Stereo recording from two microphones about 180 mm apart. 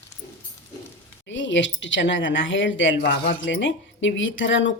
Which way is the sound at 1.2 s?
90° left.